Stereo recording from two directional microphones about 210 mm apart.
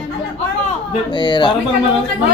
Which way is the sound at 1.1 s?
20° left (ahead or behind).